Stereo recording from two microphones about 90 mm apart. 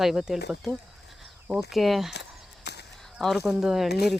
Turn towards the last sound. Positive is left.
turn(degrees=-5)  # may be behind; listen again after turning